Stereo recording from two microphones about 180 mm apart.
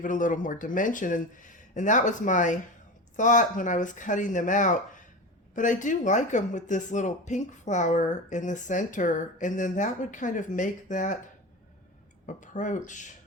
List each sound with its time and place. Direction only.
0.0 s speech: 45° left (ahead or behind)
12.2 s speech: 45° left (ahead or behind)